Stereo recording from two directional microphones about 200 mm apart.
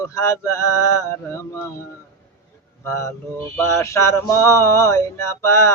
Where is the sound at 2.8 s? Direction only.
15° left (ahead or behind).